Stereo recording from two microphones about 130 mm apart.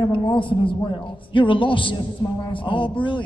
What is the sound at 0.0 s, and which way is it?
A woman's voice, 40° left (ahead or behind).